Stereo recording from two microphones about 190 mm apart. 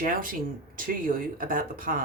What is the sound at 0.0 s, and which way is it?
A woman's voice, 45° right (ahead or behind).